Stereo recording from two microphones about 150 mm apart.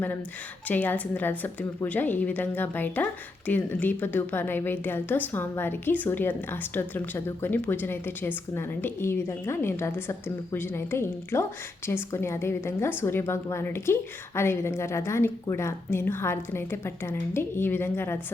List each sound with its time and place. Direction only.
0.7 s a woman's voice: 10° left (ahead or behind)